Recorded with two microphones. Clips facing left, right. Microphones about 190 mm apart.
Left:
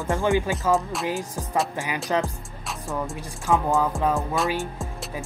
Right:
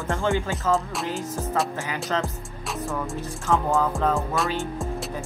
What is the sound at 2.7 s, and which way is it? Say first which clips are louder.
Music: right 1 dB; centre (ahead or behind).